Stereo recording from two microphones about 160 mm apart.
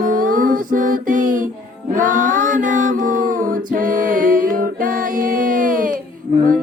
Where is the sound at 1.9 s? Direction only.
55° right (ahead or behind).